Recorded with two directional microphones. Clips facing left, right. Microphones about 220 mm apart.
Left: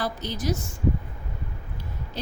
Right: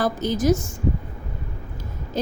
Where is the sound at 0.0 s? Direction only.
45° right (ahead or behind).